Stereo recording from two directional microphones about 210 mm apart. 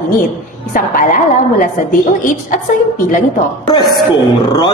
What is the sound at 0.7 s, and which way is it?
Speech, 40° left (ahead or behind).